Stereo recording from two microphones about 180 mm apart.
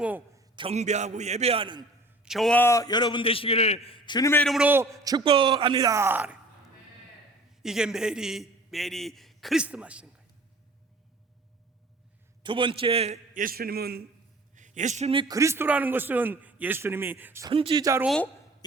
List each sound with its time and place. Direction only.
0.0 s a sound: 10° right (ahead or behind)
0.5 s a man's voice: 30° right (ahead or behind)
2.2 s a man's voice: centre (ahead or behind); by 4.3 s 25° left (ahead or behind)
4.3 s a man's voice: 10° left (ahead or behind)
4.5 s a man's voice: 10° right (ahead or behind)
7.6 s a man's voice: 5° right (ahead or behind)
12.4 s a man's voice: 30° right (ahead or behind)
13.3 s a man's voice: 50° right (ahead or behind)
14.5 s a man's voice: 45° right (ahead or behind); by 17.5 s 15° right (ahead or behind)
17.5 s a man's voice: 30° right (ahead or behind)
18.0 s a man's voice: centre (ahead or behind)